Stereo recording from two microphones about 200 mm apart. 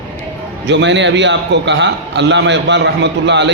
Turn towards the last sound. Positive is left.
turn(degrees=-60)  # may be behind; listen again after turning